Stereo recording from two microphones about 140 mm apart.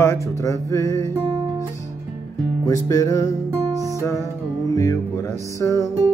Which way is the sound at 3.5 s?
25° right (ahead or behind).